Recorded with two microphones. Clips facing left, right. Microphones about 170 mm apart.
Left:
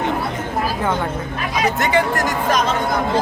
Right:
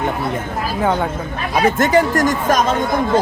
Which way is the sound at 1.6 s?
45° right (ahead or behind).